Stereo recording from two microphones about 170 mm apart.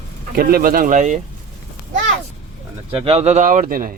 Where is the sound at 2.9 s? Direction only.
35° right (ahead or behind); by 4.0 s 55° right (ahead or behind).